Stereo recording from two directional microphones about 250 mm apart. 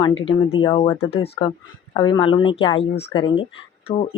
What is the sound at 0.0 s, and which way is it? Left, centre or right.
A woman's voice, centre.